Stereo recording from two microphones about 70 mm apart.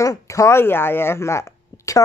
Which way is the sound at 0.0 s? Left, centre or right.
Left.